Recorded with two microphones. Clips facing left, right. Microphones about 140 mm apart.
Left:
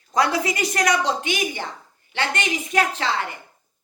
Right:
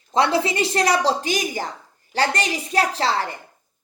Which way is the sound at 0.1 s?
30° right (ahead or behind).